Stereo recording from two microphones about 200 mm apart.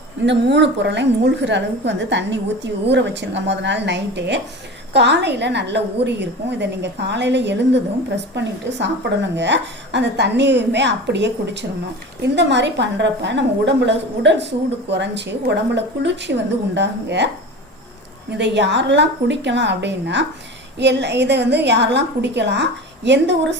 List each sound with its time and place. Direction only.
0.3 s a woman's voice: 60° right (ahead or behind)
18.3 s a woman's voice: 60° right (ahead or behind)